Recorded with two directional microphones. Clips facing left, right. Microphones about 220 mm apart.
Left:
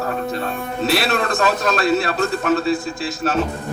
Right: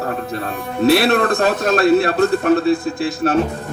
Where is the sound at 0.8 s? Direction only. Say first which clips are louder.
Right 6 dB; 55° right (ahead or behind).